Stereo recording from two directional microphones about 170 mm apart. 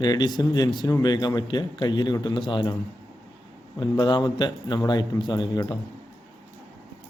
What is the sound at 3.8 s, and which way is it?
Speech, 25° left (ahead or behind).